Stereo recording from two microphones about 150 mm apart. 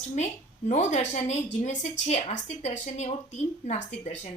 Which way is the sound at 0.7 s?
55° left (ahead or behind).